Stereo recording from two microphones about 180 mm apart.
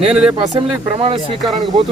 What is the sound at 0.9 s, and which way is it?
Speech, 35° right (ahead or behind).